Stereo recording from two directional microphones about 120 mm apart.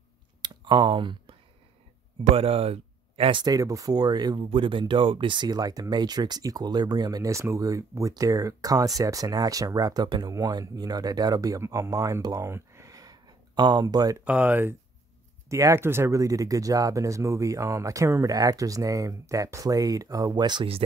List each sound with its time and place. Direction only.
0.4 s a sound: 40° right (ahead or behind)
2.3 s speech: 55° right (ahead or behind)
3.4 s speech: 30° right (ahead or behind)
4.5 s speech: 45° right (ahead or behind)
10.3 s speech: 30° right (ahead or behind)
14.2 s speech: 10° right (ahead or behind); by 20.6 s 35° right (ahead or behind)